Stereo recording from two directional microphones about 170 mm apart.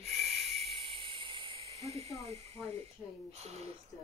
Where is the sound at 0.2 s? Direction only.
35° right (ahead or behind).